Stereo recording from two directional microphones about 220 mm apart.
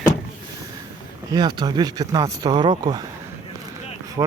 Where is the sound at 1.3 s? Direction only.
20° right (ahead or behind).